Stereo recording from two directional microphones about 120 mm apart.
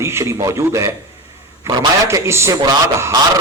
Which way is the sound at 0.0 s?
20° right (ahead or behind).